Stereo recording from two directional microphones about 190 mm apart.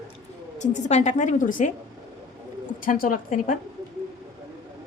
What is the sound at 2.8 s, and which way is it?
Speech, 45° left (ahead or behind).